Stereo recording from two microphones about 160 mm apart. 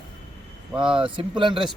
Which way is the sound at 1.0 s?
30° right (ahead or behind).